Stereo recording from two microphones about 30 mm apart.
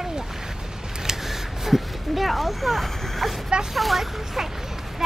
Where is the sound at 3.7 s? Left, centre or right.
Centre.